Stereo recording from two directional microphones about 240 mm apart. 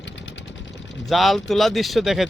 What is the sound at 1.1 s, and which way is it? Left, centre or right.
Speech, centre.